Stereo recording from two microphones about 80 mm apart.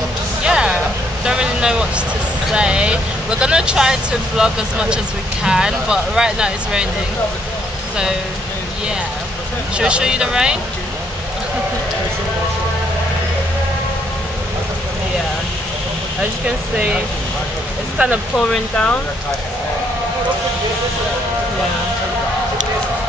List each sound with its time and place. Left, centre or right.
0.4 s a sound: centre
1.2 s vehicle: centre
2.5 s speech: centre
9.8 s speech: centre
16.7 s speech: centre
18.3 s speech: centre